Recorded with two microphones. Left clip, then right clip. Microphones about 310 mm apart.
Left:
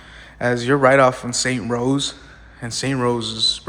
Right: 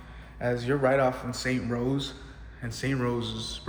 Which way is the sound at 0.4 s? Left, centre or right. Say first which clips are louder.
Left 10 dB; left.